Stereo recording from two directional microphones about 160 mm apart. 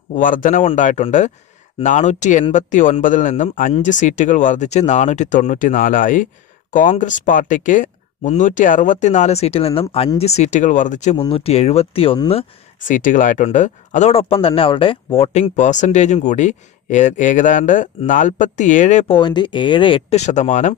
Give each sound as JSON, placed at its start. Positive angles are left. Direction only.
{"t": 0.1, "sound": "speech", "side_deg": 55}
{"t": 12.8, "sound": "speech", "side_deg": 55}
{"t": 19.1, "sound": "speech", "side_deg": 30}